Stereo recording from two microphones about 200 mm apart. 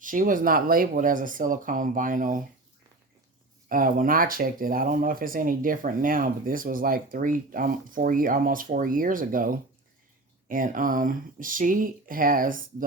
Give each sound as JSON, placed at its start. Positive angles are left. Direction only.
{"t": 0.0, "sound": "speech", "side_deg": -40}
{"t": 3.7, "sound": "speech", "side_deg": -45}